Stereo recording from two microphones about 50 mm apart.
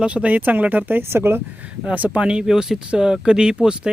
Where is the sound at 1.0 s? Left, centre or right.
Right.